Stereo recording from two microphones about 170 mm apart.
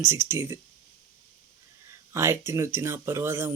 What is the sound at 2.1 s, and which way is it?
Speech, 15° right (ahead or behind).